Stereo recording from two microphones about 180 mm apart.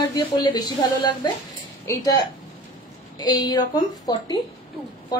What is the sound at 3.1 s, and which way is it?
A woman's voice, 20° left (ahead or behind).